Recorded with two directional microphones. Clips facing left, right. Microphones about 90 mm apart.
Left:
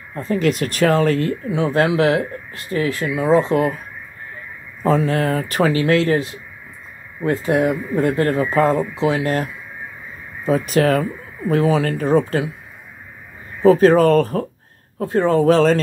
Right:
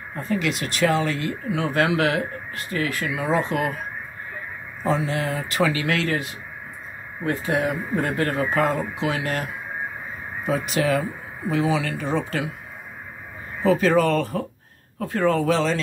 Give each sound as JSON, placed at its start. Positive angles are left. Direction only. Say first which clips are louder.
{"t": 0.1, "sound": "speech", "louder": "left 6 dB", "side_deg": 35}
{"t": 1.5, "sound": "speech", "louder": "left 3 dB", "side_deg": 30}
{"t": 4.8, "sound": "speech", "louder": "left 6 dB", "side_deg": 50}
{"t": 7.2, "sound": "speech", "louder": "left 6 dB", "side_deg": 35}
{"t": 13.6, "sound": "speech", "louder": "left 7 dB", "side_deg": 40}
{"t": 15.0, "sound": "speech", "louder": "left 5 dB", "side_deg": 30}